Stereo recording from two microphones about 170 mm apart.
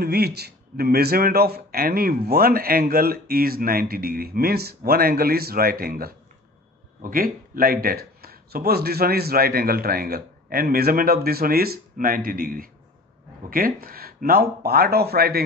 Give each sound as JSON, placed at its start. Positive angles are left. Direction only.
{"t": 0.0, "sound": "a man's voice", "side_deg": -70}